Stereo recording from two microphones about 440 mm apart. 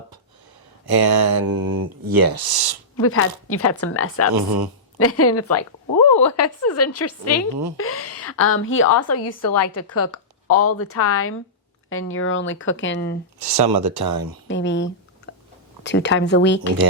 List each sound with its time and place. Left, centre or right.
0.9 s speech: right
3.0 s a woman's voice: left
13.4 s speech: right
14.4 s speech: left
15.3 s chewing: left
15.8 s speech: left